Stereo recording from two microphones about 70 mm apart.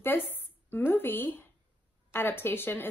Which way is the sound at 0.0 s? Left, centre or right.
Left.